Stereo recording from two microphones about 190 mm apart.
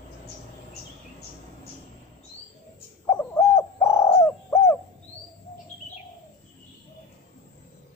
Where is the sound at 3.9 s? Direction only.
15° left (ahead or behind).